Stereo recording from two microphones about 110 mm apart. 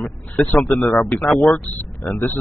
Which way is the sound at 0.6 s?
Centre (ahead or behind).